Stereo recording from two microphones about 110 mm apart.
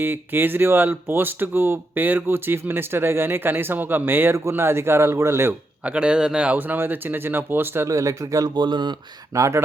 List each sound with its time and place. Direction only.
0.0 s speech: 20° right (ahead or behind)
5.8 s speech: 10° right (ahead or behind); by 8.4 s 30° right (ahead or behind)
8.5 s speech: 45° right (ahead or behind)
9.3 s speech: 30° right (ahead or behind)